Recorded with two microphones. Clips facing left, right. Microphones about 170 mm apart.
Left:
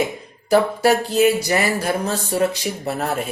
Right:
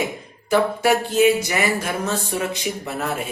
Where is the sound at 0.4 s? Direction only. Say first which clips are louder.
Left 2 dB; 35° left (ahead or behind).